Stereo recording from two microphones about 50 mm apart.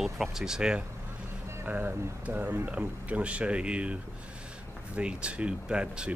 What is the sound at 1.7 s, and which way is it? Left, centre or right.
Speech, right.